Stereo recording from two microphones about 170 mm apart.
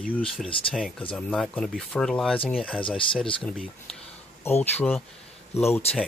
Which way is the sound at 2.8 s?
30° left (ahead or behind).